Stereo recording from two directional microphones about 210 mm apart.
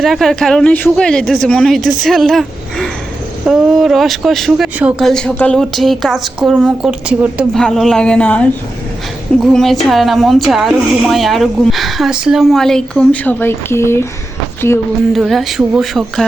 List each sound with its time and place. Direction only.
0.0 s speech: centre (ahead or behind)
15.1 s speech: centre (ahead or behind)